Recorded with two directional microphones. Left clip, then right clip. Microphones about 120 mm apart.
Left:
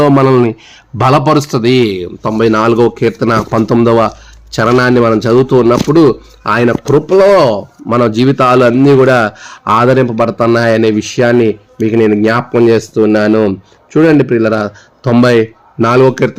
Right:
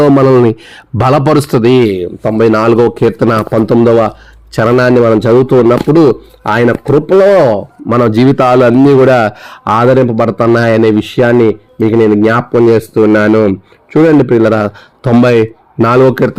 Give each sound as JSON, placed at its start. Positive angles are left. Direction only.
{"t": 0.0, "sound": "a man's voice", "side_deg": -30}
{"t": 2.5, "sound": "a man's voice", "side_deg": -30}
{"t": 3.8, "sound": "a man's voice", "side_deg": -5}
{"t": 15.2, "sound": "a man's voice", "side_deg": -40}